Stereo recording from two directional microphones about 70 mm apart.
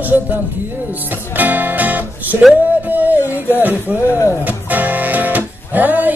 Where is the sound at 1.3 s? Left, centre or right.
Right.